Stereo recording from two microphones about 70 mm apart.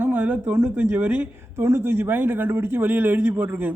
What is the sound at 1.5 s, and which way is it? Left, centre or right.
Speech, right.